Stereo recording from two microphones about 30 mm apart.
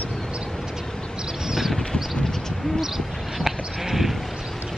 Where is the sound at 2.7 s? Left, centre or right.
Centre.